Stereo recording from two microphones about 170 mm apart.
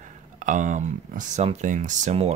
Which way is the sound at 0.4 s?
45° right (ahead or behind).